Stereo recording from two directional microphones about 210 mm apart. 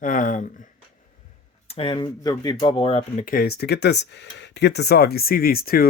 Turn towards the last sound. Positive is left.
turn(degrees=45)  # may be behind; listen again after turning